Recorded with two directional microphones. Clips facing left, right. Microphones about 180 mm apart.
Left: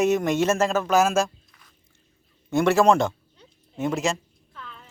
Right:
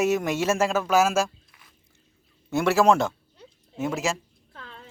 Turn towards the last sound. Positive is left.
turn(degrees=-35)  # may be behind; listen again after turning